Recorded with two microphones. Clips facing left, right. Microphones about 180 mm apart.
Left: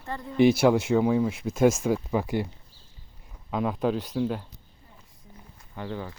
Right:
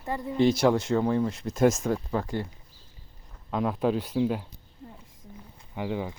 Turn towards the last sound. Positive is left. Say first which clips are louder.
# right 4 dB
turn(degrees=-15)  # may be behind; listen again after turning